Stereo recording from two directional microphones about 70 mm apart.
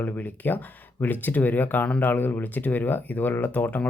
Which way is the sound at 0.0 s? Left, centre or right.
Left.